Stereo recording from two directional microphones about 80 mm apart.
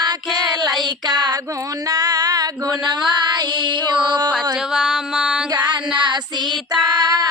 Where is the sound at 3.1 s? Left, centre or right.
Right.